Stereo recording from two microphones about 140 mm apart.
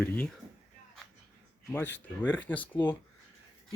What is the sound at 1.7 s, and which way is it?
Speech, 15° left (ahead or behind).